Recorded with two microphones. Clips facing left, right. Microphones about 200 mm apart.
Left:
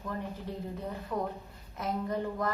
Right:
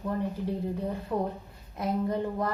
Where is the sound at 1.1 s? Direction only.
30° right (ahead or behind).